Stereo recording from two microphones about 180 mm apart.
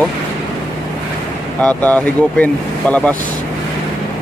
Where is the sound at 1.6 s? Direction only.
10° left (ahead or behind).